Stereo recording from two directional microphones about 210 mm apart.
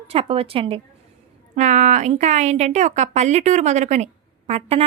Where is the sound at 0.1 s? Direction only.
30° right (ahead or behind).